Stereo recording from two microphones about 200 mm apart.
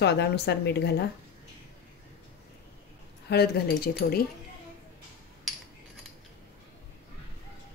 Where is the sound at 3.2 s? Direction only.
55° left (ahead or behind).